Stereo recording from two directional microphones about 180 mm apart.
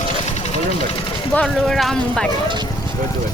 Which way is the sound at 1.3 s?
5° left (ahead or behind).